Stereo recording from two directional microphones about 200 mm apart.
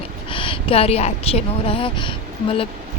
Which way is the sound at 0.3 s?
25° left (ahead or behind).